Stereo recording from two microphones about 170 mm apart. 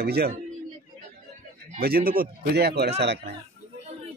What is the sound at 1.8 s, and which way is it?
Speech, 60° right (ahead or behind).